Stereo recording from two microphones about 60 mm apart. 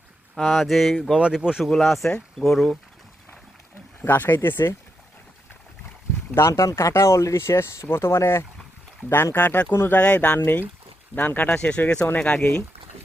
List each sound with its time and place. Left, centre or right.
0.3 s a sound: centre
1.1 s speech: centre
1.7 s a sound: centre
4.0 s speech: left
6.5 s speech: left
6.7 s speech: left
9.1 s speech: left
9.7 s speech: left
10.0 s speech: left
10.4 s speech: left
11.4 s speech: centre